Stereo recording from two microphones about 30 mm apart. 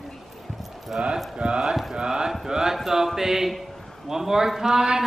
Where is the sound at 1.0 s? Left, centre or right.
Right.